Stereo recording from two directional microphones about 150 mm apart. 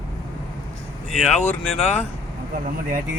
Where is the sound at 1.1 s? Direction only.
5° left (ahead or behind).